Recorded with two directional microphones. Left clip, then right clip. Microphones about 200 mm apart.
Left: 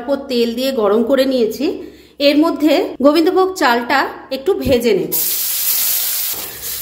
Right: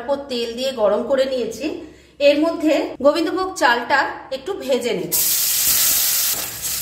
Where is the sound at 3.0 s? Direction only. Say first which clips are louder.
Left 5 dB; 30° left (ahead or behind).